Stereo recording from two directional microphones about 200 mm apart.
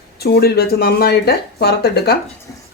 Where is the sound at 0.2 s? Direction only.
55° left (ahead or behind).